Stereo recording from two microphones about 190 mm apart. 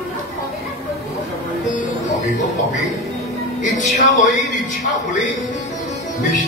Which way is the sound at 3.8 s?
40° left (ahead or behind).